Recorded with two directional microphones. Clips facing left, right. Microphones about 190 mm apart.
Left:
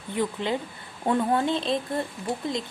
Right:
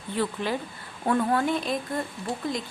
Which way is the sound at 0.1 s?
20° left (ahead or behind).